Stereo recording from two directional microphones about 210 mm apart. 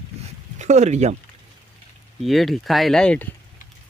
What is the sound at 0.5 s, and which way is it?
Speech, 35° right (ahead or behind).